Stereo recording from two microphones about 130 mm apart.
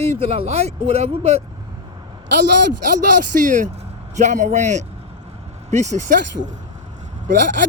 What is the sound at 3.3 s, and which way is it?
Speech, 85° right.